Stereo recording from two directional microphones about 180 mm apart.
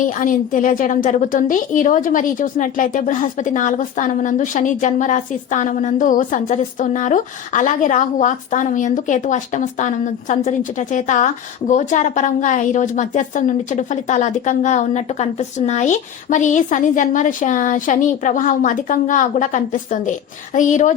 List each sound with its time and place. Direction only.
0.0 s a woman's voice: 45° left (ahead or behind)